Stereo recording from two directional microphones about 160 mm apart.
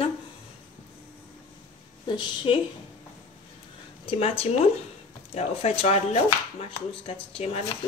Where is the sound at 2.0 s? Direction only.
30° left (ahead or behind).